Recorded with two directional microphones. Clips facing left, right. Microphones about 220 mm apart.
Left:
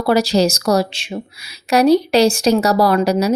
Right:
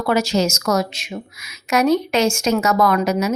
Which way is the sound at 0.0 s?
35° left (ahead or behind).